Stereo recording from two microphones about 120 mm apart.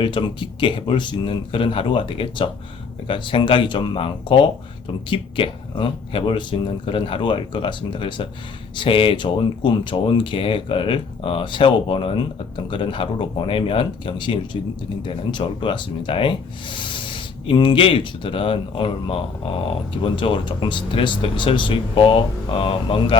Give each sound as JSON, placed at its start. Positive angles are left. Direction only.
{"t": 0.0, "sound": "speech", "side_deg": 40}